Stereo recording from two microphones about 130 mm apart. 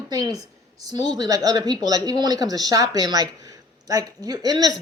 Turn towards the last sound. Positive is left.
turn(degrees=-30)  # may be behind; listen again after turning